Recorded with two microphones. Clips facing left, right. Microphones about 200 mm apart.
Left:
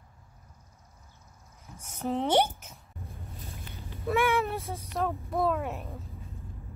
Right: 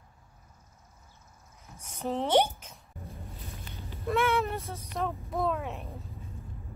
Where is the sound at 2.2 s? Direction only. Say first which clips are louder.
Right 1 dB; 10° left (ahead or behind).